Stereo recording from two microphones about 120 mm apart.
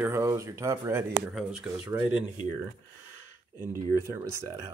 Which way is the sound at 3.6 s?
20° right (ahead or behind).